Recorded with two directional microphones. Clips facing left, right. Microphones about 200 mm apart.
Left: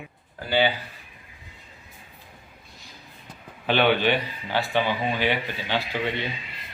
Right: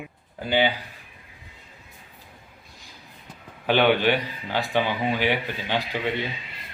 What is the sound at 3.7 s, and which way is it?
Speech, 15° right (ahead or behind).